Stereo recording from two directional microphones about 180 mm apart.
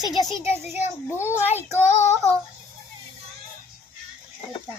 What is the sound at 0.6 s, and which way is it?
Speech, 40° left (ahead or behind).